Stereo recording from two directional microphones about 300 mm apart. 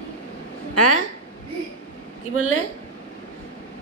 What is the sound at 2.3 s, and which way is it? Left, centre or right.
Speech, left.